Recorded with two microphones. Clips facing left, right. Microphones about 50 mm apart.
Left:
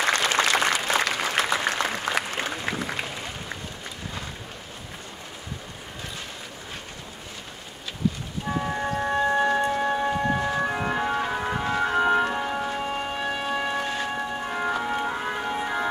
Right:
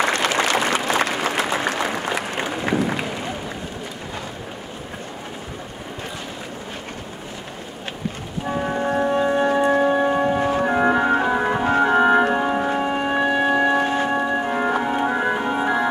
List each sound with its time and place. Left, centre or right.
0.0 s applause: right
8.6 s music: right
9.0 s music: right
9.8 s church bell: centre
10.4 s organ: right
11.6 s music: right